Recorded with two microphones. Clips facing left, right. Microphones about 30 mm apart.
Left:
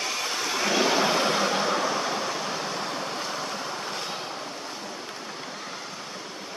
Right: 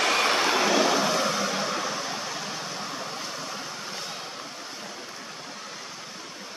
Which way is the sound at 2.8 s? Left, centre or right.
Left.